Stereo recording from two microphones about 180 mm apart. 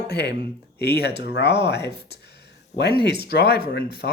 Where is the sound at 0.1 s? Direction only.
65° left (ahead or behind).